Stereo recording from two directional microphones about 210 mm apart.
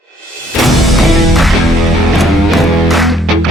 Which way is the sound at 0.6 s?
Centre (ahead or behind).